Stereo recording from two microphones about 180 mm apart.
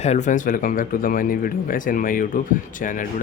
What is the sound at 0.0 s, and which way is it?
Speech, 40° left (ahead or behind).